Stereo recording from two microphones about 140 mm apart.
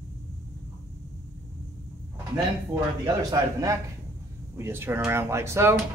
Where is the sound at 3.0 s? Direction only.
25° right (ahead or behind).